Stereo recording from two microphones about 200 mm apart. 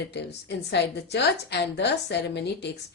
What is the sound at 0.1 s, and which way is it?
A woman's voice, 60° left (ahead or behind).